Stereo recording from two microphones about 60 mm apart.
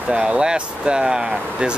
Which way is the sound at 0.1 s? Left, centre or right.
Centre.